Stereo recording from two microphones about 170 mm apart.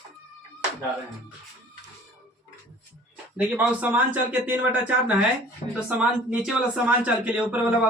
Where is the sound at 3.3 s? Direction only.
10° right (ahead or behind).